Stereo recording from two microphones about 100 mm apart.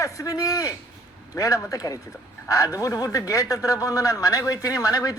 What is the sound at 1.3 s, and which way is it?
A man's voice, 35° left (ahead or behind).